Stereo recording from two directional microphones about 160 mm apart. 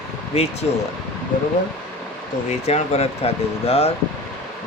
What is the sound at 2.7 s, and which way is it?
Speech, 40° left (ahead or behind).